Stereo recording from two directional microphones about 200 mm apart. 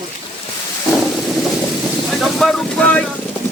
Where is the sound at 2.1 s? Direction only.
Centre (ahead or behind).